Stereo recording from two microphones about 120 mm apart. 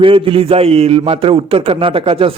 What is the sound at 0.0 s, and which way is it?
A man's voice, 50° right (ahead or behind).